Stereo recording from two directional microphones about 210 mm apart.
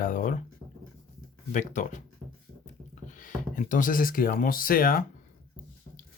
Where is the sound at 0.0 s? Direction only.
40° left (ahead or behind).